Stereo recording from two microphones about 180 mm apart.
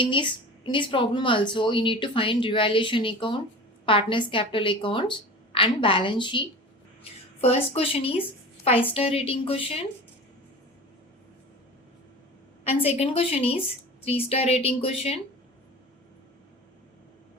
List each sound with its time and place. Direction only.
0.0 s speech: 25° left (ahead or behind)
7.4 s a woman's voice: 35° left (ahead or behind)
12.6 s a woman's voice: 35° left (ahead or behind)